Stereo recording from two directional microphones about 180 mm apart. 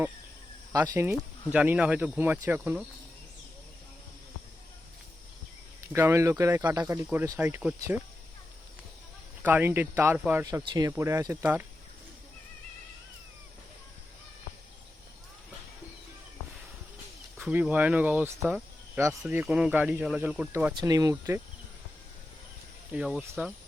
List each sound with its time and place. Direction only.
0.7 s speech: 15° right (ahead or behind)
5.9 s speech: 15° right (ahead or behind)
9.4 s speech: 10° right (ahead or behind)
17.4 s speech: 10° right (ahead or behind)
20.7 s speech: 20° right (ahead or behind)
22.9 s speech: 5° right (ahead or behind)